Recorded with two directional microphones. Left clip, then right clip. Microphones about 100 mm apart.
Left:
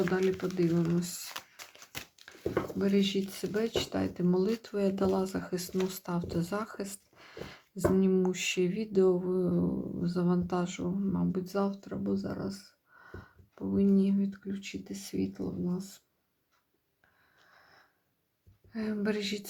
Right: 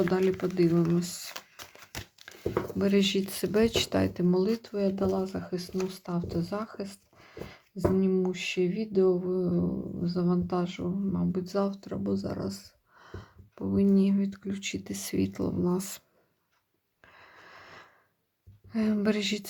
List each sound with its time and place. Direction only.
0.8 s speech: 35° right (ahead or behind)
2.7 s speech: 40° right (ahead or behind)
4.2 s speech: 20° right (ahead or behind); by 16.0 s 90° right
17.2 s a sound: 90° right
18.7 s speech: 45° right (ahead or behind)